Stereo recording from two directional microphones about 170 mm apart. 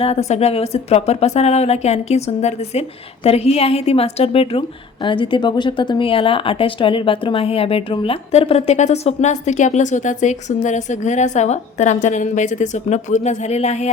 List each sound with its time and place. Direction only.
0.0 s speech: 40° left (ahead or behind)